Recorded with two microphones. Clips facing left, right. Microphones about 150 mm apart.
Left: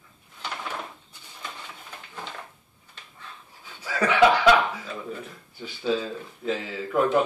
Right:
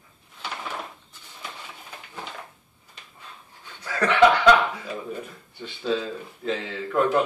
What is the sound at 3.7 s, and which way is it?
Speech, 10° left (ahead or behind).